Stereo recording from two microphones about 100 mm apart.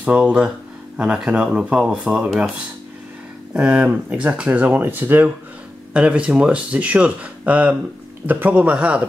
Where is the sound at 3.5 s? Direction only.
10° right (ahead or behind).